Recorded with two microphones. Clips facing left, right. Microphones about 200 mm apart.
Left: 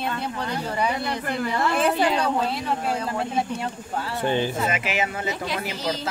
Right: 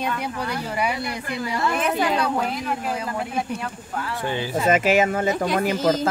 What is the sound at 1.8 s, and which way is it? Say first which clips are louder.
A woman's voice: left 1 dB; 30° left (ahead or behind).